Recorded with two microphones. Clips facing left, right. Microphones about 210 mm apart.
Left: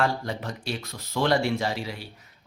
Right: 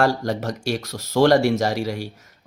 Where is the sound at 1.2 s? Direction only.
40° right (ahead or behind).